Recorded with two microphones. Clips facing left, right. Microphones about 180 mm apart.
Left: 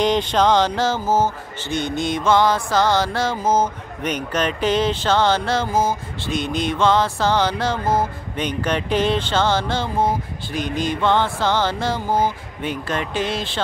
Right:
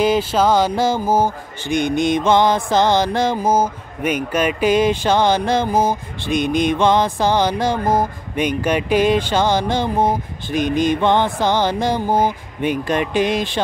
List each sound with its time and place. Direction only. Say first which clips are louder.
0.0 s speech: right 2 dB; 5° right (ahead or behind)